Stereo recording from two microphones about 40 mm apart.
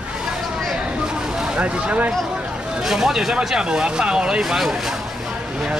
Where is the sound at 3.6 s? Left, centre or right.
Right.